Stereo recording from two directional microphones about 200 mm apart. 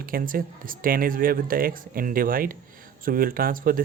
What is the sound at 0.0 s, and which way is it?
Speech, 45° right (ahead or behind).